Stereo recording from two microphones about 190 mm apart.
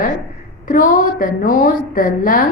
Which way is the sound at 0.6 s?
45° left (ahead or behind).